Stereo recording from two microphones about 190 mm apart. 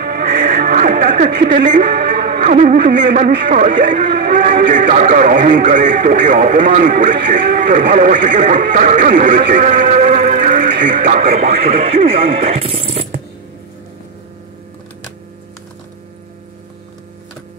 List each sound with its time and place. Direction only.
0.0 s music: 50° right (ahead or behind)
0.6 s a man's voice: 45° right (ahead or behind)
11.7 s speech: 30° right (ahead or behind)